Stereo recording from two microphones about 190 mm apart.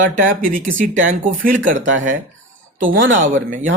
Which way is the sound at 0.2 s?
45° right (ahead or behind).